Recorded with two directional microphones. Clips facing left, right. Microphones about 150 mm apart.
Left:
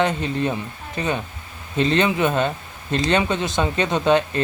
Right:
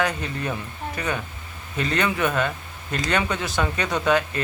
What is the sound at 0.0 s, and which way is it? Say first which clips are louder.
Speech: left 5 dB; 25° left (ahead or behind).